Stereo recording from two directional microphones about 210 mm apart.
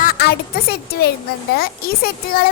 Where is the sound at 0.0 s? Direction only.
45° left (ahead or behind).